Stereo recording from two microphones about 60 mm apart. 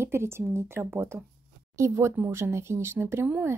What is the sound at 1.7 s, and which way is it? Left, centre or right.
Speech, right.